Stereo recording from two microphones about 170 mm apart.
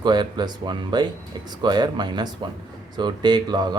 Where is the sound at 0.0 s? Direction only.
25° right (ahead or behind).